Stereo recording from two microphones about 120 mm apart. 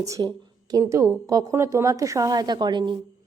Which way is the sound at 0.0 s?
30° right (ahead or behind).